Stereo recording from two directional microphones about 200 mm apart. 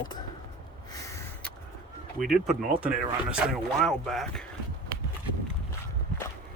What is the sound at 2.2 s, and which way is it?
Speech, centre (ahead or behind).